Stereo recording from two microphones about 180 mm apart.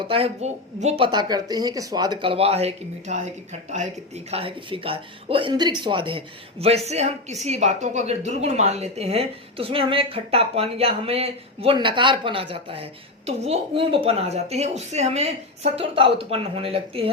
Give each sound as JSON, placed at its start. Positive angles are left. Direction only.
{"t": 0.0, "sound": "speech", "side_deg": -30}